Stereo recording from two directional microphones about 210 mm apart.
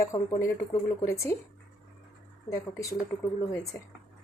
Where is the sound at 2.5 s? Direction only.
15° left (ahead or behind).